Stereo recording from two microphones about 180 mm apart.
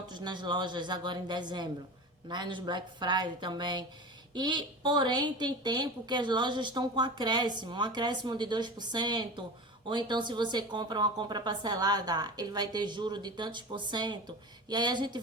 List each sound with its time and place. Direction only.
0.1 s a woman's voice: 25° right (ahead or behind)